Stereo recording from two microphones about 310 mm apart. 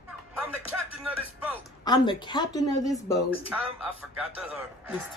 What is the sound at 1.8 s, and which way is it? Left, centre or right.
Speech, centre.